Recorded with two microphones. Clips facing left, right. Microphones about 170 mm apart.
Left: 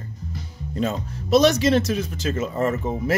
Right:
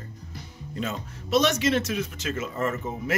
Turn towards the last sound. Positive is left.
turn(degrees=35)  # may be behind; listen again after turning